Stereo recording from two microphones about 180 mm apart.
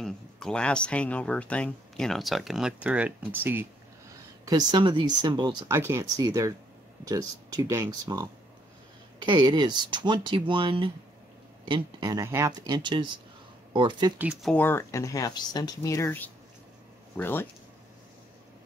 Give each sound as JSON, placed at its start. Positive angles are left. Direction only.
{"t": 0.0, "sound": "speech", "side_deg": 5}
{"t": 4.5, "sound": "speech", "side_deg": -25}
{"t": 14.1, "sound": "speech", "side_deg": -5}
{"t": 14.5, "sound": "speech", "side_deg": 10}